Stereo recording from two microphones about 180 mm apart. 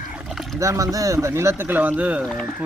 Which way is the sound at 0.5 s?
15° right (ahead or behind).